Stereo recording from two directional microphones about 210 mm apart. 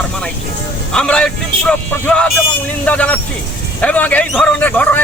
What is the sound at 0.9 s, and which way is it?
A man's voice, 5° left (ahead or behind).